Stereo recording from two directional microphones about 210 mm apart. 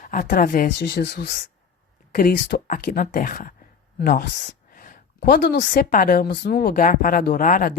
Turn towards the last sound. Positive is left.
turn(degrees=40)  # may be behind; listen again after turning